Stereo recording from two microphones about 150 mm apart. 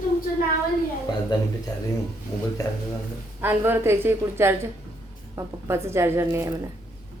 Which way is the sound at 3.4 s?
15° right (ahead or behind).